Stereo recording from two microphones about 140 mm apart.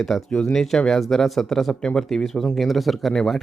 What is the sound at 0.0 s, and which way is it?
Speech, 5° left (ahead or behind).